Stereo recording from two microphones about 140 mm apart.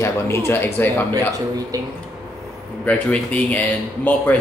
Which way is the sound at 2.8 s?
10° left (ahead or behind).